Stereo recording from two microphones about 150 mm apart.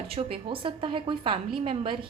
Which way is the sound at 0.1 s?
35° right (ahead or behind).